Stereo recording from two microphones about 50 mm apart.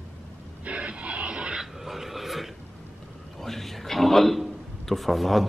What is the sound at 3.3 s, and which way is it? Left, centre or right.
A man's voice, centre.